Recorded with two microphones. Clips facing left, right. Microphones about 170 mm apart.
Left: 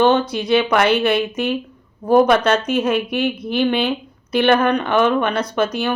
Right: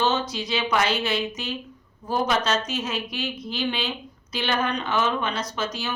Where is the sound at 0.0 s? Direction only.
55° left (ahead or behind).